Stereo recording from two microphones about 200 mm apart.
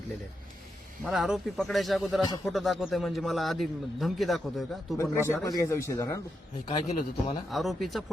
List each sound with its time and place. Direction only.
1.0 s a man's voice: centre (ahead or behind)
5.1 s speech: 15° left (ahead or behind)
6.7 s a man's voice: 25° left (ahead or behind)
7.5 s a man's voice: centre (ahead or behind)